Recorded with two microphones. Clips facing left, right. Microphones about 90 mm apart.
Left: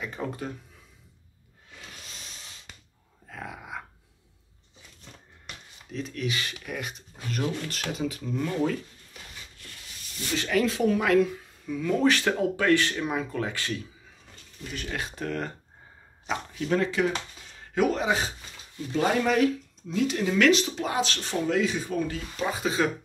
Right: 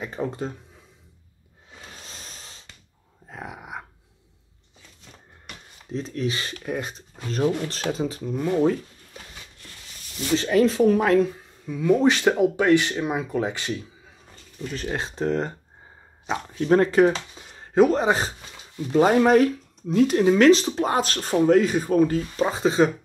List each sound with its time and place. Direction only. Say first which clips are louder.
0.0 s speech: right 5 dB; 30° right (ahead or behind)
1.7 s a sound: right 3 dB; 35° right (ahead or behind)
3.3 s dog: right 2 dB; 20° right (ahead or behind)
5.9 s speech: right 4 dB; 30° right (ahead or behind)
10.3 s speech: right 6 dB; 30° right (ahead or behind)
11.7 s speech: right 4 dB; 15° right (ahead or behind)
14.8 s speech: right 6 dB; 30° right (ahead or behind)
16.5 s speech: right 9 dB; 45° right (ahead or behind)
17.4 s a sound: right 8 dB; 35° right (ahead or behind)
18.9 s speech: right 7 dB; 40° right (ahead or behind)